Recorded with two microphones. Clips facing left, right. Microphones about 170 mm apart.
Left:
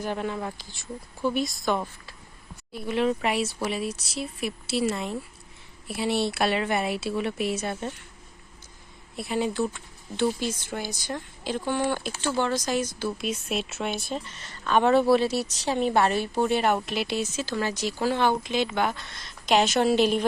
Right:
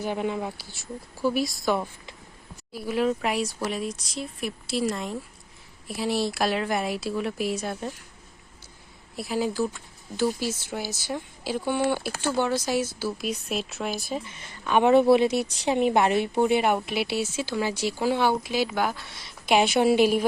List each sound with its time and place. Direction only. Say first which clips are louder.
0.0 s a woman's voice: right 2 dB; 15° right (ahead or behind)
9.1 s a woman's voice: even; centre (ahead or behind)
14.3 s a woman's voice: even; 15° right (ahead or behind)